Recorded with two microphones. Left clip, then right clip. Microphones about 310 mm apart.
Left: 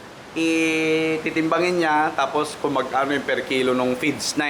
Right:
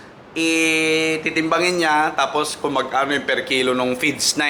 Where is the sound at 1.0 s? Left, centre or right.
Centre.